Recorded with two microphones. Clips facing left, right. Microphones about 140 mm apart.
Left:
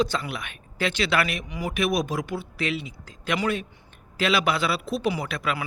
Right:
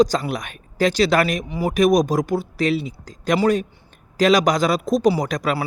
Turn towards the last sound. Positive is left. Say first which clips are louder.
# right 7 dB
turn(degrees=-40)  # may be behind; listen again after turning